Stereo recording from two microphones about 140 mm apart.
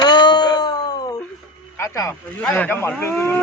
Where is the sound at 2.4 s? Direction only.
10° left (ahead or behind).